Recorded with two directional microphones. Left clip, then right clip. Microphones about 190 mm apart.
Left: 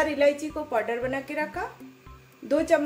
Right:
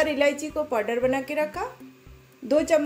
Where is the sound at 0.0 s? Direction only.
20° right (ahead or behind).